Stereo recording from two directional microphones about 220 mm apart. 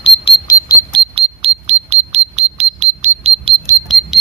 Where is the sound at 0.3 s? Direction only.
20° left (ahead or behind).